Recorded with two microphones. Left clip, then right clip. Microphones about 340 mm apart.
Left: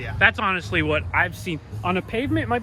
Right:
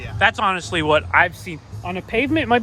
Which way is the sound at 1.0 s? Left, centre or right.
Right.